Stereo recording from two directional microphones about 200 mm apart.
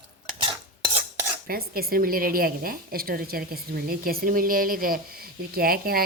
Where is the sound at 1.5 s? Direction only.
50° right (ahead or behind).